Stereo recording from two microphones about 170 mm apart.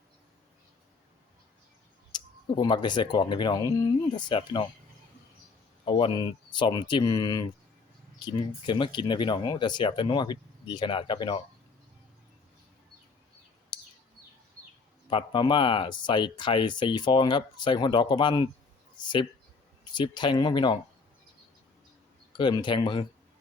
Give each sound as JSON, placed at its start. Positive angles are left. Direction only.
{"t": 2.1, "sound": "speech", "side_deg": 25}
{"t": 5.8, "sound": "speech", "side_deg": 30}
{"t": 13.7, "sound": "bird", "side_deg": 25}
{"t": 15.1, "sound": "speech", "side_deg": 30}
{"t": 22.3, "sound": "speech", "side_deg": 25}